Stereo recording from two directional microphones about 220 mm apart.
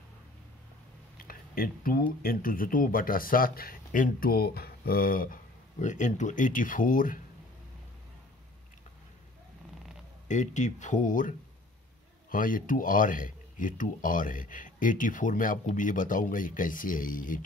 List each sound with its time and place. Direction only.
1.2 s a sound: 40° left (ahead or behind)
2.2 s speech: 40° left (ahead or behind)
10.2 s speech: 35° left (ahead or behind)